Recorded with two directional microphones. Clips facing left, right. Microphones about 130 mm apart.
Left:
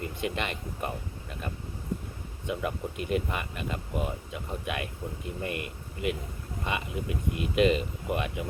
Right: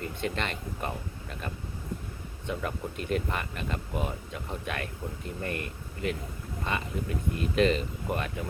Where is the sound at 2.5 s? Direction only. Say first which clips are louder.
Left 1 dB; 10° left (ahead or behind).